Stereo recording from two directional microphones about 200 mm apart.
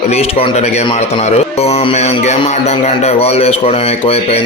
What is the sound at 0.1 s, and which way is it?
A man's voice, 30° left (ahead or behind).